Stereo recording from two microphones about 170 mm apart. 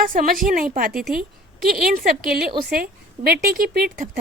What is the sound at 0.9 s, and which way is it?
Speech, centre (ahead or behind).